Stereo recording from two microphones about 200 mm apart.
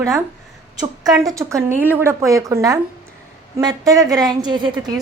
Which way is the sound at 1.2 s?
15° right (ahead or behind).